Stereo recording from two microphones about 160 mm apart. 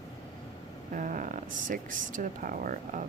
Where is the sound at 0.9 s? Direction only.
55° right (ahead or behind).